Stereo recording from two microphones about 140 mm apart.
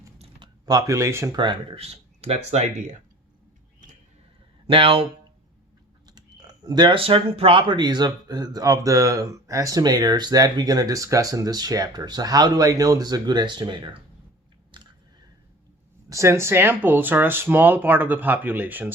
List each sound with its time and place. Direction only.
0.2 s typing: 35° right (ahead or behind); by 1.4 s 20° right (ahead or behind)
1.4 s speech: 40° right (ahead or behind)
4.6 s speech: 40° right (ahead or behind)
6.1 s speech: 30° right (ahead or behind)
14.7 s a sound: 35° right (ahead or behind)
16.0 s speech: 20° right (ahead or behind)